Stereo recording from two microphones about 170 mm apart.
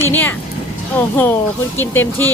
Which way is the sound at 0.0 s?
10° left (ahead or behind).